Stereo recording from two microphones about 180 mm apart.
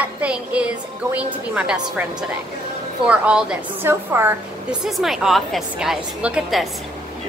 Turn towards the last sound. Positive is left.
turn(degrees=-5)  # may be behind; listen again after turning